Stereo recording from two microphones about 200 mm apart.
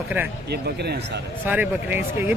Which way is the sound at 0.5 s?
55° right (ahead or behind).